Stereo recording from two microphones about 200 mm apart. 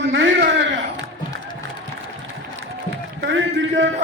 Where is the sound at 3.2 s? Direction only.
65° right (ahead or behind).